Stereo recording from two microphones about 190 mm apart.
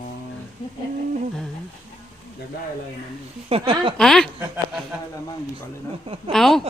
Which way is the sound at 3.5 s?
30° right (ahead or behind).